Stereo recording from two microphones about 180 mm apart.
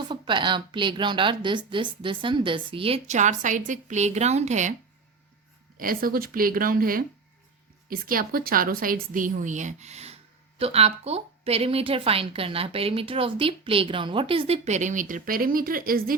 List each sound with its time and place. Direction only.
0.0 s a woman's voice: 25° right (ahead or behind)
5.7 s a woman's voice: 55° right (ahead or behind)